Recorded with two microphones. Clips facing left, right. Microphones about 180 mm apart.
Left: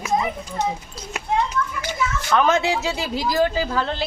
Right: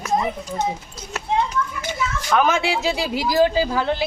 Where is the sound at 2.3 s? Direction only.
10° right (ahead or behind).